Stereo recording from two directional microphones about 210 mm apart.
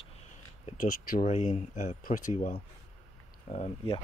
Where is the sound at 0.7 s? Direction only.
40° left (ahead or behind).